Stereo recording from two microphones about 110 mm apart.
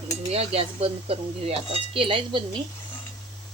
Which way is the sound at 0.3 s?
65° right (ahead or behind).